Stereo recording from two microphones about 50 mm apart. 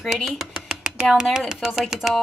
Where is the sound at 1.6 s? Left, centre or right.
Centre.